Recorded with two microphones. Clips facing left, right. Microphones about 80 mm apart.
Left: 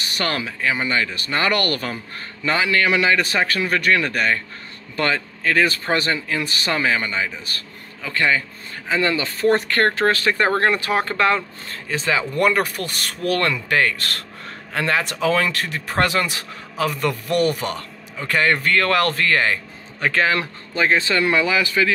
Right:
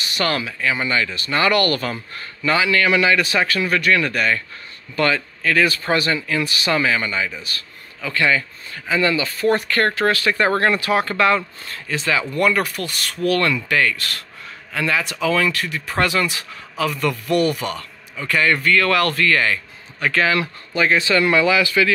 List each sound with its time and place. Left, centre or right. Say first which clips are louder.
0.2 s speech: right 2 dB; left
8.9 s speech: right 1 dB; left
10.3 s speech: right 1 dB; left